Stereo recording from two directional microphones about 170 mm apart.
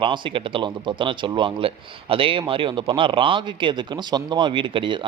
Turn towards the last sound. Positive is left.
turn(degrees=-30)  # may be behind; listen again after turning